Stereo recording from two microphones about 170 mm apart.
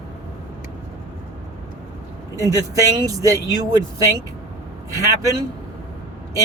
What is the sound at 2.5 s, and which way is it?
Speech, 20° right (ahead or behind).